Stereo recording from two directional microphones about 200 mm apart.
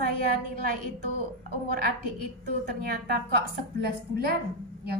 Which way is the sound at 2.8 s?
50° right (ahead or behind).